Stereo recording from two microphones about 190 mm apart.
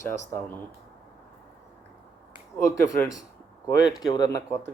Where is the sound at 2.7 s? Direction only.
20° left (ahead or behind).